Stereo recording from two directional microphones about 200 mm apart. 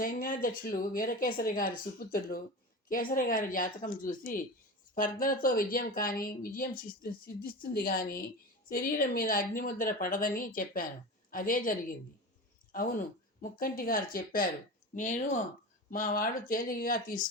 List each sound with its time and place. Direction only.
0.0 s speech: 45° left (ahead or behind)